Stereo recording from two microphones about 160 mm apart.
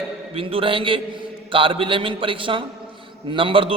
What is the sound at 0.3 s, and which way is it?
A man's voice, 35° right (ahead or behind).